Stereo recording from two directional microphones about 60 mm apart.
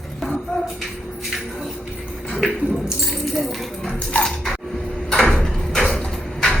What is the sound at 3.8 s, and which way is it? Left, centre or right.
Music, centre.